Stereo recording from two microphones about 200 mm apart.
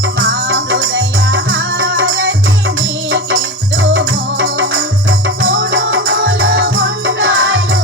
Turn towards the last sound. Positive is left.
turn(degrees=-80)